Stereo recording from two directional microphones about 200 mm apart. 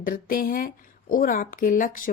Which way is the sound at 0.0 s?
45° left (ahead or behind).